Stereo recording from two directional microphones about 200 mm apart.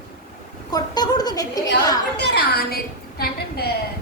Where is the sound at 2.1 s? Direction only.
55° left (ahead or behind).